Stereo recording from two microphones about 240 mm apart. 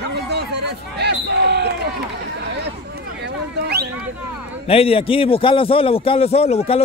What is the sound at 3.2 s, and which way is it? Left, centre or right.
Speech, right.